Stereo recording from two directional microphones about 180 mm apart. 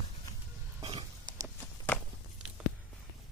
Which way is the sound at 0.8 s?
25° right (ahead or behind).